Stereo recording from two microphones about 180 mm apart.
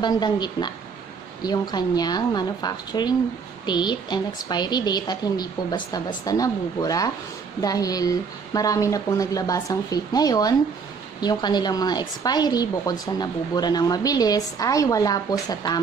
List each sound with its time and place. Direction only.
0.0 s a woman's voice: 25° left (ahead or behind)